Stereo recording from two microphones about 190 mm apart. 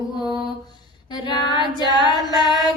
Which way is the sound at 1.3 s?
20° left (ahead or behind).